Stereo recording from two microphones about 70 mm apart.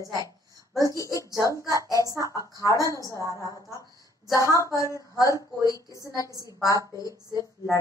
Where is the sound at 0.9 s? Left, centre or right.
Left.